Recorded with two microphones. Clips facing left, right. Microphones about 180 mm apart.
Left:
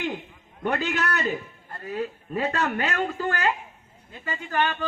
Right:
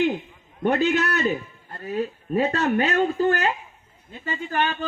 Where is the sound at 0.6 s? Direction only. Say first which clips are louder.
Right 5 dB; 25° right (ahead or behind).